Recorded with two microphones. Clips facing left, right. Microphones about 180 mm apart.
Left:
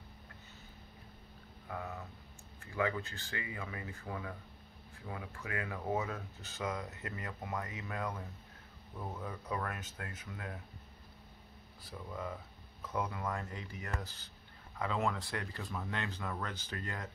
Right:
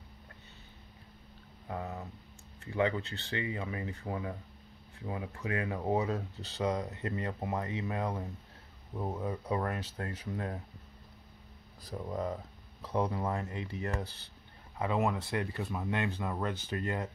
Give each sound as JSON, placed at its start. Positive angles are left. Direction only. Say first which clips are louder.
{"t": 1.7, "sound": "speech", "louder": "right 4 dB", "side_deg": -30}
{"t": 11.8, "sound": "speech", "louder": "right 7 dB", "side_deg": -40}